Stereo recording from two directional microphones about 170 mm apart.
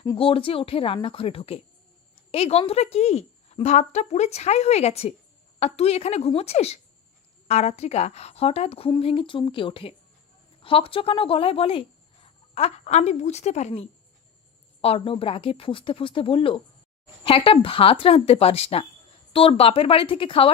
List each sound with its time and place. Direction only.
0.2 s a woman's voice: 30° left (ahead or behind)